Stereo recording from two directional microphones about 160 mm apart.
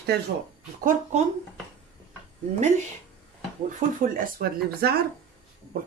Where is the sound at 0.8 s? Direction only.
45° right (ahead or behind).